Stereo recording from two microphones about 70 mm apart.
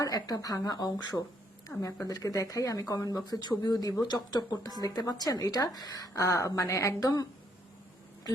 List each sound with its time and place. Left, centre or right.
0.0 s a woman's voice: left
1.8 s a woman's voice: left
4.9 s a woman's voice: left